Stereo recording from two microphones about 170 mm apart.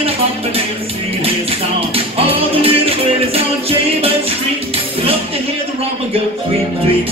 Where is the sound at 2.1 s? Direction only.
35° right (ahead or behind).